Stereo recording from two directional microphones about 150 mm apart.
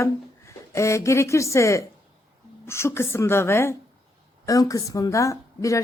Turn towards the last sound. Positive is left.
turn(degrees=20)  # may be behind; listen again after turning